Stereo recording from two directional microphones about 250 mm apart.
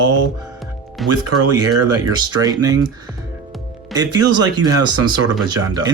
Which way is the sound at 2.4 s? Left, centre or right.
Centre.